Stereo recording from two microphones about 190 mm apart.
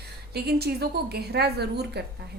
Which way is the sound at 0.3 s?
55° right (ahead or behind).